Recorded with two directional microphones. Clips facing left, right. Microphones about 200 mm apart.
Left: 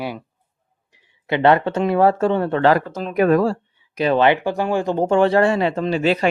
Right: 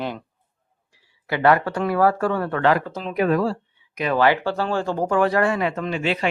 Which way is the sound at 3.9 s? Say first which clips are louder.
Left 3 dB; 30° left (ahead or behind).